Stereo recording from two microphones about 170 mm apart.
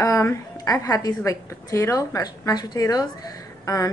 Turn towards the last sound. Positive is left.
turn(degrees=20)  # may be behind; listen again after turning